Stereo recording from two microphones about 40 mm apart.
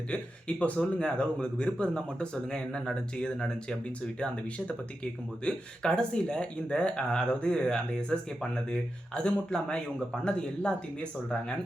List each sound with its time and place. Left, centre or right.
0.1 s speech: left
4.2 s speech: left